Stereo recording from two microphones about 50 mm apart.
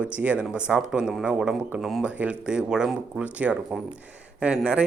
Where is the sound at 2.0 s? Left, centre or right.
Right.